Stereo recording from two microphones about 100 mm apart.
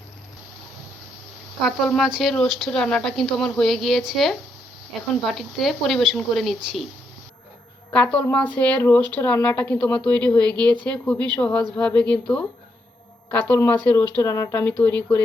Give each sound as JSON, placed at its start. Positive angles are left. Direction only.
{"t": 1.6, "sound": "speech", "side_deg": 0}
{"t": 7.9, "sound": "speech", "side_deg": 10}
{"t": 14.2, "sound": "speech", "side_deg": 30}
{"t": 14.5, "sound": "speech", "side_deg": 15}